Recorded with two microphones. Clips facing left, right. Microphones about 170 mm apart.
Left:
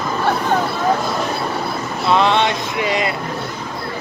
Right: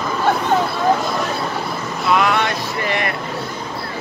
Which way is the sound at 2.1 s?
25° left (ahead or behind).